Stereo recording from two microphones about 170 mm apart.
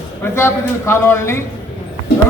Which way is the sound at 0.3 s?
15° left (ahead or behind).